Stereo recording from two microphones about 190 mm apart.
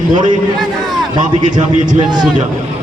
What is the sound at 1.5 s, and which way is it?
Speech, 40° right (ahead or behind).